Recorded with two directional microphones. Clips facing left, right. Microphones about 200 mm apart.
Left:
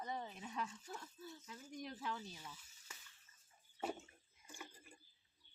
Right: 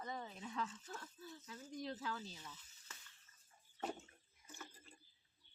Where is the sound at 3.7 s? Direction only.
5° left (ahead or behind).